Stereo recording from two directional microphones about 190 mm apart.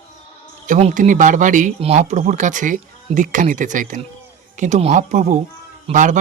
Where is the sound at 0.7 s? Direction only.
40° right (ahead or behind).